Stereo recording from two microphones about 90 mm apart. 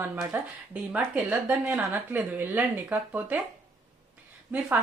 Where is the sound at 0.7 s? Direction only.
15° right (ahead or behind).